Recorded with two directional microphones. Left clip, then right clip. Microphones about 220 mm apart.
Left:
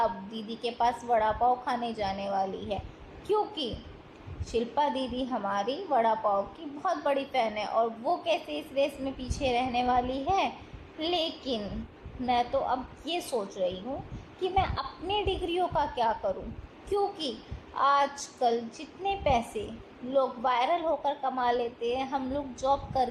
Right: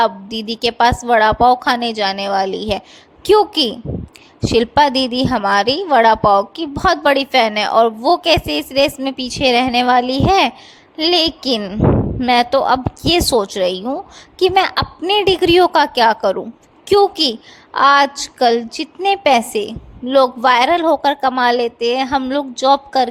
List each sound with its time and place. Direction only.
0.0 s a woman's voice: 45° right (ahead or behind)